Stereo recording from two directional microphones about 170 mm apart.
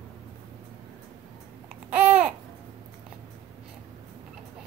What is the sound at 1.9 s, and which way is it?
Babbling, 10° right (ahead or behind).